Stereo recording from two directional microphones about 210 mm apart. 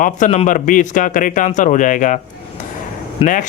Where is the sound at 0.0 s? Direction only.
35° left (ahead or behind).